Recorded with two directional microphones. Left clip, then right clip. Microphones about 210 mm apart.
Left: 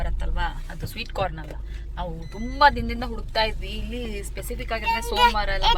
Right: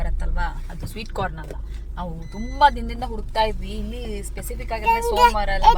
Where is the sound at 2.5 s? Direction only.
Centre (ahead or behind).